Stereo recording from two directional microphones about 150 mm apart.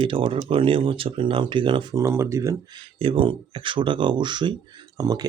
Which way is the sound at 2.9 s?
35° right (ahead or behind).